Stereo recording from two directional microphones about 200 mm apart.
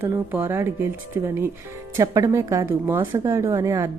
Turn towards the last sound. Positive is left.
turn(degrees=-15)  # may be behind; listen again after turning